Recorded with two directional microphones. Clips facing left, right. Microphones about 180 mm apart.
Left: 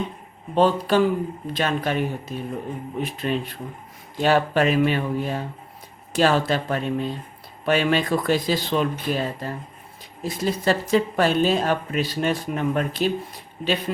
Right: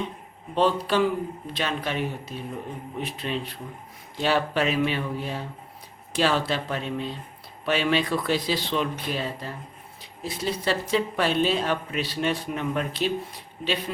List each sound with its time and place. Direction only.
0.5 s speech: 45° left (ahead or behind)